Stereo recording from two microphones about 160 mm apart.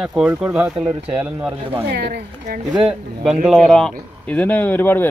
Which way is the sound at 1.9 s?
90° right.